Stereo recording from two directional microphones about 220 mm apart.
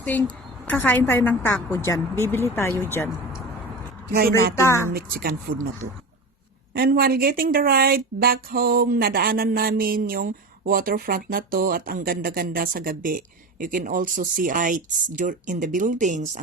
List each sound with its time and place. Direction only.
0.0 s a woman's voice: 5° left (ahead or behind)
4.1 s a woman's voice: 45° right (ahead or behind)
4.5 s a woman's voice: 10° left (ahead or behind)
4.9 s a woman's voice: 40° right (ahead or behind)
6.7 s speech: 45° right (ahead or behind)